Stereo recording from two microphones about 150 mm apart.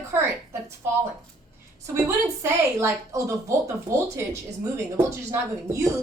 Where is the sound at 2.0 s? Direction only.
20° right (ahead or behind).